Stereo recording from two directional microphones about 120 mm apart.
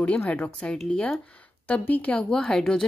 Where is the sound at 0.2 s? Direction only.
10° left (ahead or behind).